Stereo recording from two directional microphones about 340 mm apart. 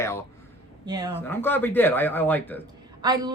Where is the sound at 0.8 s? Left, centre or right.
Centre.